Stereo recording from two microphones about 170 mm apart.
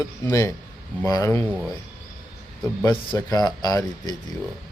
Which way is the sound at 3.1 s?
20° left (ahead or behind).